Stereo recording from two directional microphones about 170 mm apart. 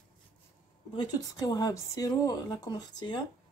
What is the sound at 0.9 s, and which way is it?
Speech, 25° left (ahead or behind).